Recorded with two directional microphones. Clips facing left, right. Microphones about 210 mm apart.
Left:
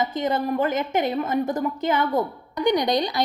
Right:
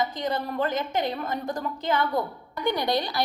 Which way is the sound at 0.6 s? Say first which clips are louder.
Left 4 dB; 10° left (ahead or behind).